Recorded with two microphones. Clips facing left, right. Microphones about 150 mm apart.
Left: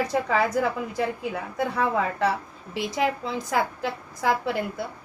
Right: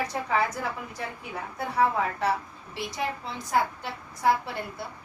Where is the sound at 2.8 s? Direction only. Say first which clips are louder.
Left 6 dB; 90° left.